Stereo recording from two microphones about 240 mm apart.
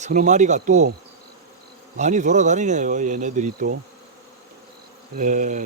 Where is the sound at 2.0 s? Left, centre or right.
Right.